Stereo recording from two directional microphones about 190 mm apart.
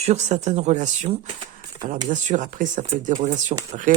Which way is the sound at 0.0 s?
35° right (ahead or behind).